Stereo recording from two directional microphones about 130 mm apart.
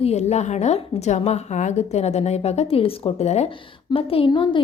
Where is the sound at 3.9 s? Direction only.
45° left (ahead or behind).